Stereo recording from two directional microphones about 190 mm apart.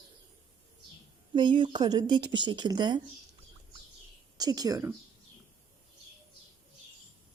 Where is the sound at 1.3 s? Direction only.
25° right (ahead or behind).